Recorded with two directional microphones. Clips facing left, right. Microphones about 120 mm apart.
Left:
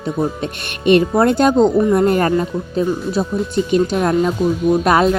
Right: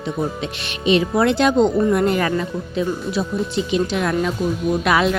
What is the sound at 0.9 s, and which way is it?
Speech, 50° left (ahead or behind).